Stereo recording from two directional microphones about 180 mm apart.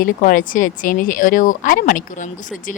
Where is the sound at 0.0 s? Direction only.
50° left (ahead or behind).